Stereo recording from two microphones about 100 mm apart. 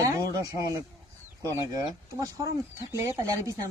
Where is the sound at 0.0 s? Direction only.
40° right (ahead or behind).